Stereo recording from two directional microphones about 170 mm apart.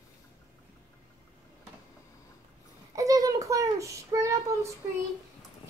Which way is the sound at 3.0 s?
20° right (ahead or behind).